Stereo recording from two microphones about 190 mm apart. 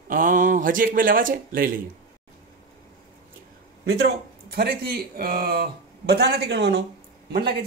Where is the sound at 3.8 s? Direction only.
55° right (ahead or behind).